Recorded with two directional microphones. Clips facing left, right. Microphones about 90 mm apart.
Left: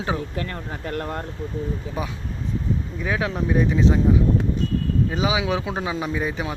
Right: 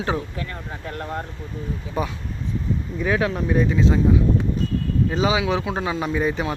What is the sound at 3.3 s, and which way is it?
Speech, 20° left (ahead or behind).